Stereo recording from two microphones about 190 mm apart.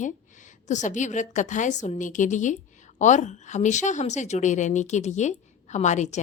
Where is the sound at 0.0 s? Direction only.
40° left (ahead or behind).